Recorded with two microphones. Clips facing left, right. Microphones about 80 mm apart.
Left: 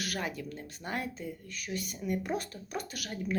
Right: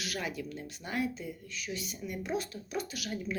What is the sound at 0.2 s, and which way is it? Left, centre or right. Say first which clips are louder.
Speech: even; left.